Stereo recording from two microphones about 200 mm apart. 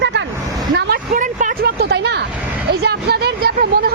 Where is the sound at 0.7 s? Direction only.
45° right (ahead or behind).